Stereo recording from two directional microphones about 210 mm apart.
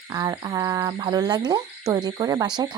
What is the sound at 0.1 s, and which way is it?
Speech, 15° right (ahead or behind).